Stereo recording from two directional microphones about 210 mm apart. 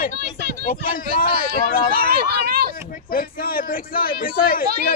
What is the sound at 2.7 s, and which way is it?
Speech, 40° left (ahead or behind).